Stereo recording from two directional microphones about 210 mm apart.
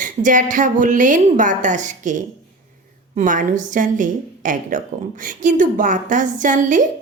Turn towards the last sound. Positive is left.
turn(degrees=-40)  # may be behind; listen again after turning